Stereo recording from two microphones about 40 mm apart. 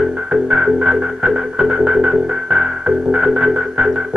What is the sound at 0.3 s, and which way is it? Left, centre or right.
Music, centre.